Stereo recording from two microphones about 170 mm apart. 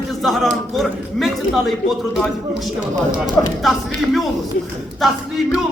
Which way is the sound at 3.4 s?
15° left (ahead or behind).